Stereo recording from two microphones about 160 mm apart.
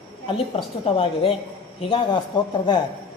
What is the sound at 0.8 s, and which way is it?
A man's voice, 35° left (ahead or behind).